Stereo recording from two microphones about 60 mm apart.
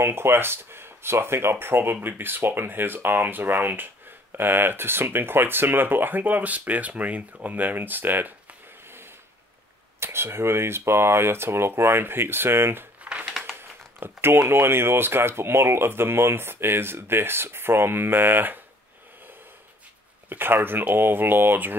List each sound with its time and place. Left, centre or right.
0.0 s speech: right
9.9 s speech: right
13.0 s crumpling: centre
13.6 s speech: right
20.2 s speech: right